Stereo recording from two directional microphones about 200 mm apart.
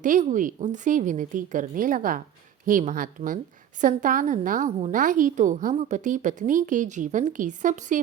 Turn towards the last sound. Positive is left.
turn(degrees=-40)  # may be behind; listen again after turning